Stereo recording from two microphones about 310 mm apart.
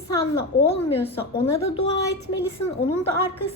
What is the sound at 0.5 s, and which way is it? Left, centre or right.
Speech, left.